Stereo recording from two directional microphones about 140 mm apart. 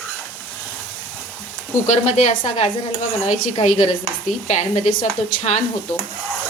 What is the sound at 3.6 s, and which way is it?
Speech, 60° left (ahead or behind).